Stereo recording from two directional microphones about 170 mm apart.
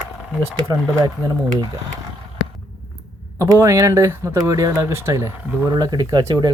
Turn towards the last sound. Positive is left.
turn(degrees=-25)  # may be behind; listen again after turning